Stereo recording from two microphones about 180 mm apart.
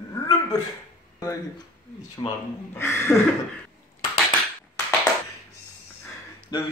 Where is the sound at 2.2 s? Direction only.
25° left (ahead or behind).